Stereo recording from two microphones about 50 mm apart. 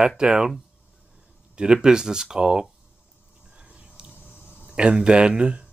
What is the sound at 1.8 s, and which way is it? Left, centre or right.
Speech, centre.